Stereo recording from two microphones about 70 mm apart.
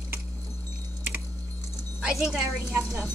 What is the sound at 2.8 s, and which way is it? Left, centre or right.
Speech, right.